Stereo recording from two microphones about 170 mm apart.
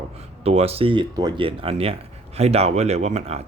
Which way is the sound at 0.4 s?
35° right (ahead or behind).